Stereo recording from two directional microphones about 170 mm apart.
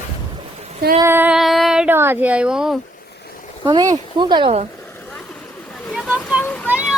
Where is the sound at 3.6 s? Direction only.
25° right (ahead or behind).